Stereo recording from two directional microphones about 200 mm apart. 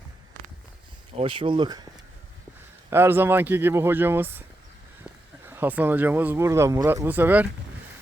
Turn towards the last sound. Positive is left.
turn(degrees=-10)  # may be behind; listen again after turning